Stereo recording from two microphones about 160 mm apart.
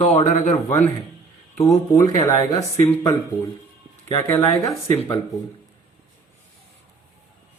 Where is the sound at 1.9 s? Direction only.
20° left (ahead or behind).